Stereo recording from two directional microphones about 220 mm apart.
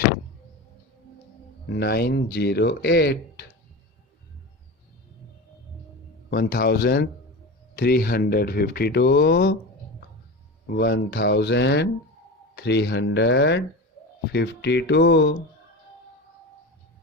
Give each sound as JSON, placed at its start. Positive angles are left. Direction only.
{"t": 1.7, "sound": "speech", "side_deg": 45}
{"t": 6.3, "sound": "speech", "side_deg": 45}
{"t": 10.8, "sound": "speech", "side_deg": 50}